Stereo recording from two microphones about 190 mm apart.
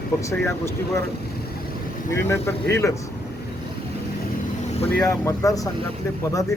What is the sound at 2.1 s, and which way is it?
Speech, 15° left (ahead or behind).